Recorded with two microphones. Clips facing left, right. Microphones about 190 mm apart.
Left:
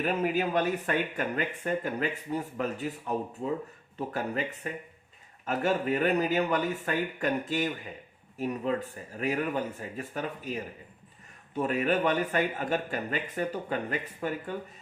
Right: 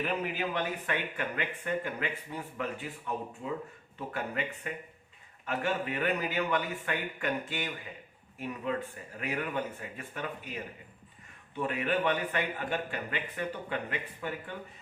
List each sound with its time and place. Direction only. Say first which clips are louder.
0.0 s speech: left 5 dB; 45° left (ahead or behind)
3.9 s speech: left 4 dB; 35° left (ahead or behind)